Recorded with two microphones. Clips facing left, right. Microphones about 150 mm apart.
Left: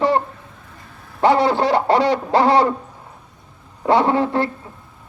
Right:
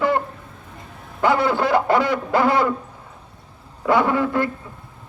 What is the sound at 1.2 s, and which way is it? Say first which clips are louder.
A man's voice: left 3 dB; 30° left (ahead or behind).